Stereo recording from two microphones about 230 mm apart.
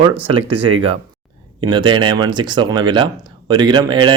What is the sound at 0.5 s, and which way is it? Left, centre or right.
Speech, right.